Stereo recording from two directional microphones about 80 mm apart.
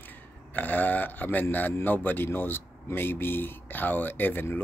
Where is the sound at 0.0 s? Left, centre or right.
Left.